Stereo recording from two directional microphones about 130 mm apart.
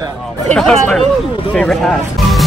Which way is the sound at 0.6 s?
5° left (ahead or behind).